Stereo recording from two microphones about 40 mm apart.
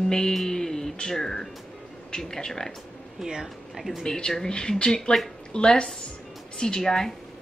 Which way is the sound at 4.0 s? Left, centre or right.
Centre.